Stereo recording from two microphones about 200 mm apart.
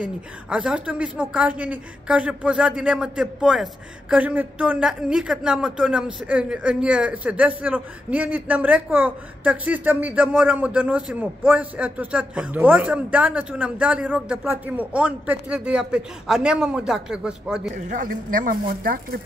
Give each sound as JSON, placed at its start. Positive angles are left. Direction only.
{"t": 0.0, "sound": "a man's voice", "side_deg": -5}
{"t": 17.8, "sound": "speech", "side_deg": -40}